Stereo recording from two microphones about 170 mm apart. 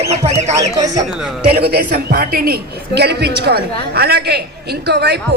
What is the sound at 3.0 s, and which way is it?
A man's voice, 75° right (ahead or behind).